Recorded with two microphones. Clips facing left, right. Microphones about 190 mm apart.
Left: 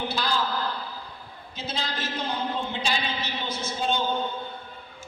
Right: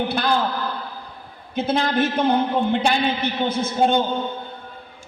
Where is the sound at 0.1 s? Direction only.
60° right (ahead or behind).